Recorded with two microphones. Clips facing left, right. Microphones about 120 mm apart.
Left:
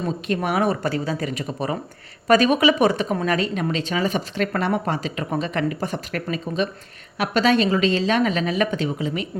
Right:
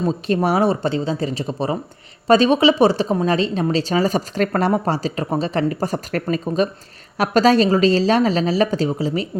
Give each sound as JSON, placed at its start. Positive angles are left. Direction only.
{"t": 0.0, "sound": "a woman's voice", "side_deg": -30}